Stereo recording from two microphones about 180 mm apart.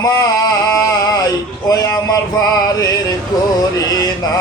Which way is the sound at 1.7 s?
20° left (ahead or behind).